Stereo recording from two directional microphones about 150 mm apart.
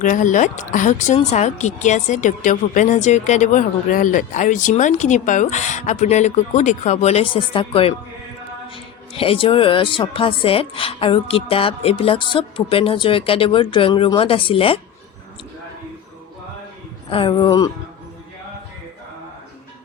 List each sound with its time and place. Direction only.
0.0 s a woman's voice: 55° left (ahead or behind); by 14.8 s 35° left (ahead or behind)
17.1 s speech: 35° left (ahead or behind)